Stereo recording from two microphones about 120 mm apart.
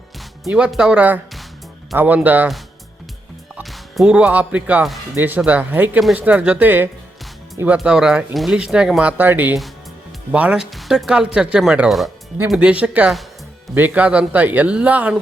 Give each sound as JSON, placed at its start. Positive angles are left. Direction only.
{"t": 0.4, "sound": "speech", "side_deg": -5}
{"t": 3.6, "sound": "speech", "side_deg": 0}
{"t": 7.8, "sound": "speech", "side_deg": -5}